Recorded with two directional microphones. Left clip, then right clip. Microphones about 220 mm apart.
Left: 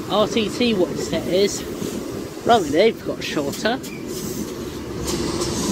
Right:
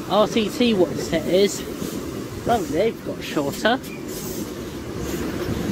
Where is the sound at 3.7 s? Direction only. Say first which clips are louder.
Right 4 dB; 25° right (ahead or behind).